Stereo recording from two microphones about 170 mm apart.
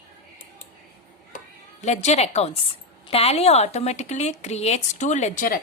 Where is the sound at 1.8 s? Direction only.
40° left (ahead or behind).